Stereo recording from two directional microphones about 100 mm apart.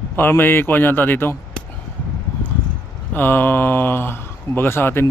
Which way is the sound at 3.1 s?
20° left (ahead or behind).